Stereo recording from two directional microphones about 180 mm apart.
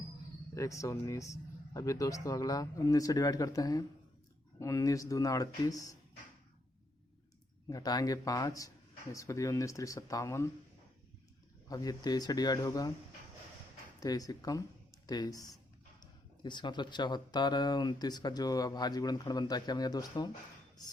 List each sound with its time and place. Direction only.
0.5 s speech: 15° left (ahead or behind)
7.7 s speech: 20° left (ahead or behind)
11.7 s speech: 20° left (ahead or behind)
14.0 s speech: 20° left (ahead or behind)